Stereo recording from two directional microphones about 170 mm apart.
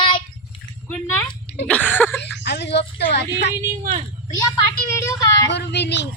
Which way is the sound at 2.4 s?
85° left.